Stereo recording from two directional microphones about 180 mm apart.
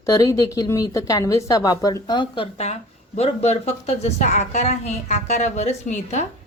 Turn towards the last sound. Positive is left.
turn(degrees=40)  # may be behind; listen again after turning